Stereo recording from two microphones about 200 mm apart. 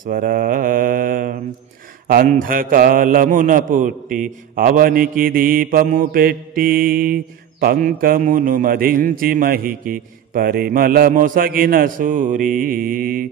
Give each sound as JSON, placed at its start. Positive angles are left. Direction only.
{"t": 0.0, "sound": "a man's voice", "side_deg": -45}